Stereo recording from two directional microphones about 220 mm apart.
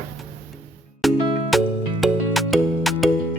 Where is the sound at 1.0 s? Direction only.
Centre (ahead or behind).